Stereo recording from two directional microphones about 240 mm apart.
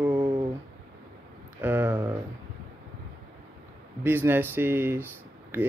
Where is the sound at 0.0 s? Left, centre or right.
Centre.